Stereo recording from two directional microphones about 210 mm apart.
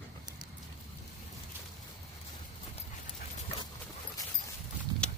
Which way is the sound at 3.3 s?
25° left (ahead or behind).